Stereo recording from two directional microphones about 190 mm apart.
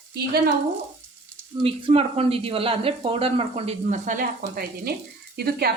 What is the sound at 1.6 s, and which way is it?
Speech, 30° right (ahead or behind).